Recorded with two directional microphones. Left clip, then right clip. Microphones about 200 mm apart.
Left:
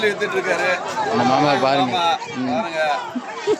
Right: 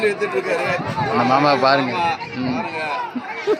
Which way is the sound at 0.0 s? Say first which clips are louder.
Even; 15° left (ahead or behind).